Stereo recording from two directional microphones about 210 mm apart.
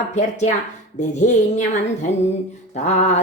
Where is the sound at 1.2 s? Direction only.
35° left (ahead or behind).